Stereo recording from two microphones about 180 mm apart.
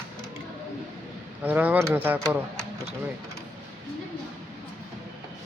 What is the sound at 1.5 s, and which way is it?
Speech, 10° right (ahead or behind).